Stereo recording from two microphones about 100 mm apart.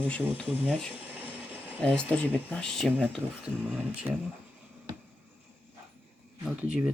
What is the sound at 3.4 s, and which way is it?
Speech, 20° right (ahead or behind).